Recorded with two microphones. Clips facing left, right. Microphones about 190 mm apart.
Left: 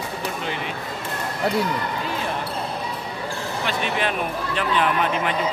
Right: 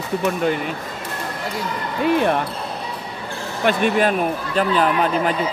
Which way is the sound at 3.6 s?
50° right (ahead or behind).